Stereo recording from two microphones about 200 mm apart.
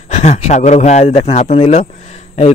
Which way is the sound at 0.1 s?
35° left (ahead or behind).